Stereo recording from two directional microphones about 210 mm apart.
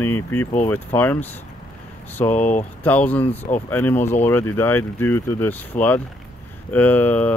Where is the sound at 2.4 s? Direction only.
35° left (ahead or behind).